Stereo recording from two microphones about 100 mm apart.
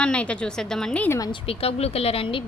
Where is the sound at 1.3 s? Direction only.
65° left (ahead or behind).